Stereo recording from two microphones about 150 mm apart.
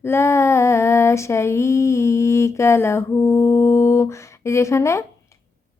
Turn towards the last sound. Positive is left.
turn(degrees=20)  # may be behind; listen again after turning